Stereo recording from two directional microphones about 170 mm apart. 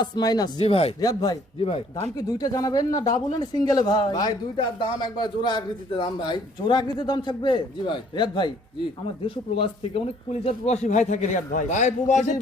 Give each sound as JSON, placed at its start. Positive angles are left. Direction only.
{"t": 0.0, "sound": "a man's voice", "side_deg": 25}
{"t": 0.6, "sound": "speech", "side_deg": 35}
{"t": 1.0, "sound": "a man's voice", "side_deg": 25}